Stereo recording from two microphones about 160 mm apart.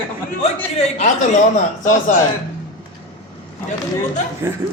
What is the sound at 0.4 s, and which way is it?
Speech, 40° left (ahead or behind).